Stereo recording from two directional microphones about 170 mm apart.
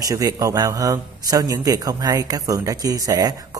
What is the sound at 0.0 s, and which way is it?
A man's voice, 20° right (ahead or behind).